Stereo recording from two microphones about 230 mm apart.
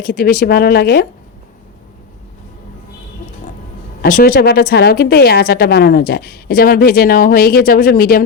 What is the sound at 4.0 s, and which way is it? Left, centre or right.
A woman's voice, left.